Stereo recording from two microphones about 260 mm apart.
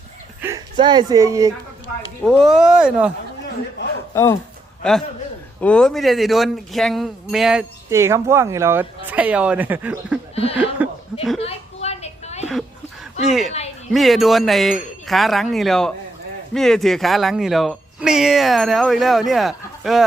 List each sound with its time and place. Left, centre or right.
0.4 s speech: centre
2.2 s speech: centre
4.1 s a man's voice: centre
10.3 s a sound: left
10.8 s speech: centre
11.3 s a sound: left
13.2 s speech: centre